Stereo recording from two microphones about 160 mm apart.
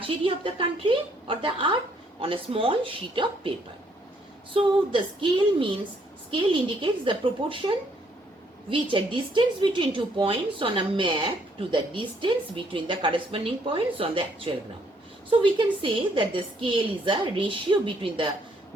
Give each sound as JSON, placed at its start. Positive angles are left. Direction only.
{"t": 0.4, "sound": "a woman's voice", "side_deg": -30}
{"t": 4.5, "sound": "a woman's voice", "side_deg": -30}